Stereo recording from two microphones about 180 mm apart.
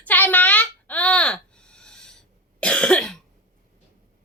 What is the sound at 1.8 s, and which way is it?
Owl, 5° left (ahead or behind).